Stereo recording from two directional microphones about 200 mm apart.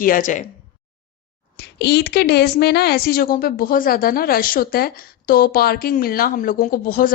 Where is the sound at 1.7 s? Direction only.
55° left (ahead or behind).